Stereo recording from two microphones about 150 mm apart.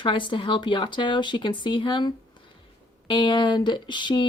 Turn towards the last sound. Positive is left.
turn(degrees=30)  # may be behind; listen again after turning